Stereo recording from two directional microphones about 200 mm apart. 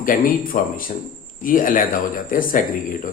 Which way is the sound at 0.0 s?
45° left (ahead or behind).